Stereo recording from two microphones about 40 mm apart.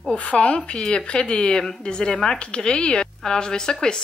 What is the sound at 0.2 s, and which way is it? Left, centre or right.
A woman's voice, left.